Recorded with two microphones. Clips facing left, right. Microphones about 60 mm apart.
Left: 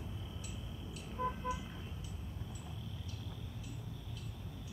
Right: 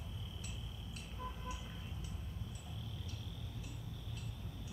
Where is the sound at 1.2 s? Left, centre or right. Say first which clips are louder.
Left 10 dB; left.